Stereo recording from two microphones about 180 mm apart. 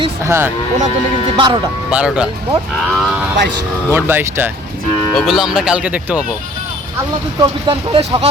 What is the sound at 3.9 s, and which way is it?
Speech, 10° right (ahead or behind).